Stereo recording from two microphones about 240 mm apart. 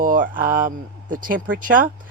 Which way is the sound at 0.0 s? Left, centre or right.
Right.